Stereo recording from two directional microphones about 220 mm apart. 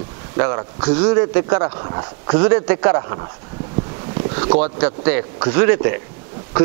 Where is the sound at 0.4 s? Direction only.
20° right (ahead or behind).